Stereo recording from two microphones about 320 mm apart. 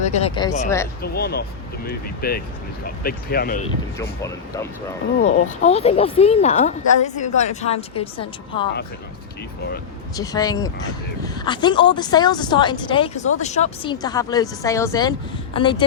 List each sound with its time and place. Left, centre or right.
0.0 s speech: centre
1.0 s speech: left
4.2 s a woman's voice: centre
5.2 s speech: centre
10.2 s a woman's voice: centre